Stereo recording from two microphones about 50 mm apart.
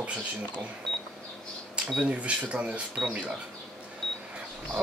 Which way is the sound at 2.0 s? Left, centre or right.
Right.